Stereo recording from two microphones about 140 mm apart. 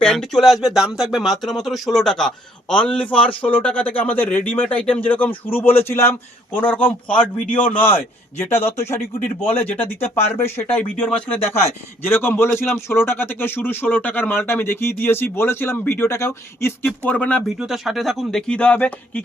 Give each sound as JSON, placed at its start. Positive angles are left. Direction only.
{"t": 0.0, "sound": "a man's voice", "side_deg": 5}
{"t": 3.2, "sound": "speech", "side_deg": 40}
{"t": 3.5, "sound": "a man's voice", "side_deg": 10}
{"t": 9.4, "sound": "speech", "side_deg": 45}
{"t": 9.7, "sound": "a man's voice", "side_deg": 15}
{"t": 17.6, "sound": "speech", "side_deg": 0}